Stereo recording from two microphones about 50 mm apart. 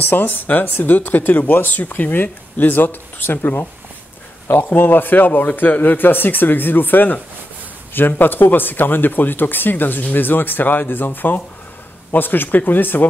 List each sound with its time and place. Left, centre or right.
0.0 s a man's voice: left
2.2 s a man's voice: left
2.7 s a man's voice: left